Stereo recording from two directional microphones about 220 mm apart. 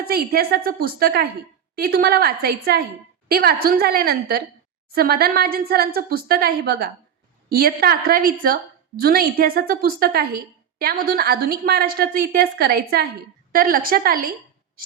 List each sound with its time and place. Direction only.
0.0 s a woman's voice: 45° right (ahead or behind)